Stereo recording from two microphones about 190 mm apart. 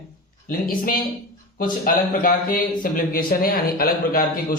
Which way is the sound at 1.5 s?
50° left (ahead or behind).